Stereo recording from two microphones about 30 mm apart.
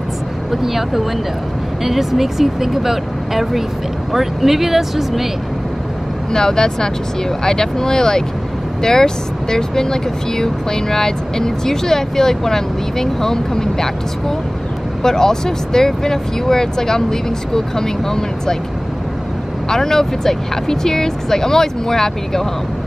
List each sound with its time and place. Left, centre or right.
0.5 s speech: centre
6.3 s speech: left
15.0 s speech: centre
19.7 s speech: centre